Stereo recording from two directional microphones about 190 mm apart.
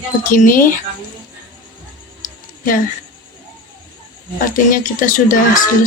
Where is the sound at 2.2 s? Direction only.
45° left (ahead or behind).